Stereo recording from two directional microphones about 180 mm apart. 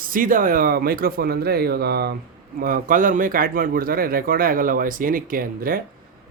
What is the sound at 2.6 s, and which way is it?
A man's voice, 50° right (ahead or behind).